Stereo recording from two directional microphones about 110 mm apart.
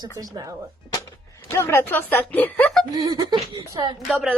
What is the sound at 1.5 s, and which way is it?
Speech, 20° left (ahead or behind).